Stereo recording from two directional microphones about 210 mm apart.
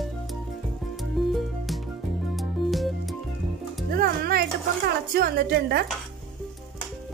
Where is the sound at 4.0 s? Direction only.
45° right (ahead or behind).